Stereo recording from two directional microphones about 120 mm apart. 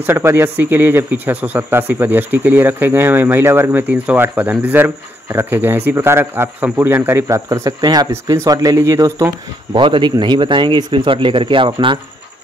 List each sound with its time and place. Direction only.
0.0 s speech: 20° right (ahead or behind)
9.8 s a man's voice: 45° right (ahead or behind)